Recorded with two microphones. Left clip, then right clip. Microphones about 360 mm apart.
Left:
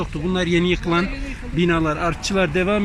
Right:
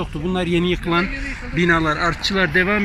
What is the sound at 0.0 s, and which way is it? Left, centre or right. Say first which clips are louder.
Speech: even; centre.